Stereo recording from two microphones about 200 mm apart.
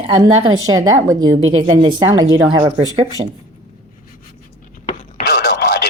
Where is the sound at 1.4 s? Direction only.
80° right.